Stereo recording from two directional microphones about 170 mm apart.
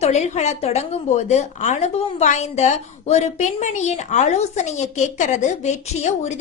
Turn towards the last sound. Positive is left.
turn(degrees=45)  # may be behind; listen again after turning